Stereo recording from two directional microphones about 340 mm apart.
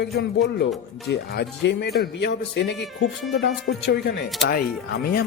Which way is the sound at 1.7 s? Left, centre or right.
Left.